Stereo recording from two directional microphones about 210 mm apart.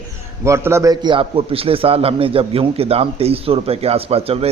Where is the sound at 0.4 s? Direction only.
15° right (ahead or behind).